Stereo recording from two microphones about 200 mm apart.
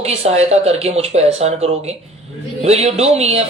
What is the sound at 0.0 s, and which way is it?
Speech, 30° right (ahead or behind).